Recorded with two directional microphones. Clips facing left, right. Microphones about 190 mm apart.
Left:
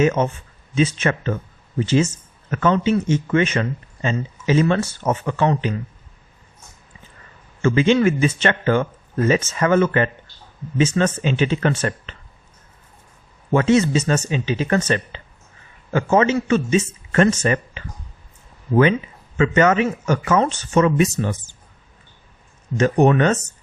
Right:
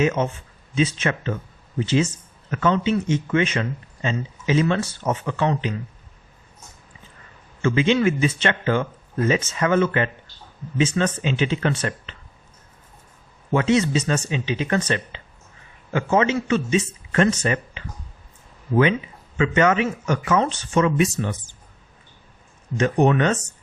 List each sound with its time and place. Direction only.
0.2 s speech: 50° left (ahead or behind)
7.6 s speech: 45° left (ahead or behind)
13.5 s speech: 45° left (ahead or behind)
19.4 s speech: 45° left (ahead or behind)
22.8 s speech: 45° left (ahead or behind)